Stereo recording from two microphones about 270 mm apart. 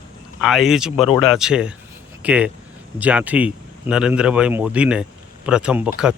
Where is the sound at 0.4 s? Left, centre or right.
Centre.